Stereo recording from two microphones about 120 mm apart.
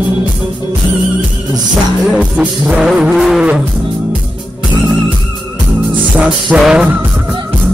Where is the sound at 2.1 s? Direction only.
5° right (ahead or behind).